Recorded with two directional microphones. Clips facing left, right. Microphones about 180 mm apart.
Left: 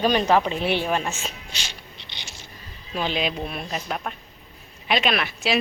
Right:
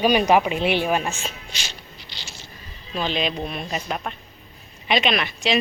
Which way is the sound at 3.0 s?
10° left (ahead or behind).